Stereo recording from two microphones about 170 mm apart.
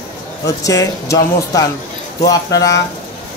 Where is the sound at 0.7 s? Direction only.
20° left (ahead or behind).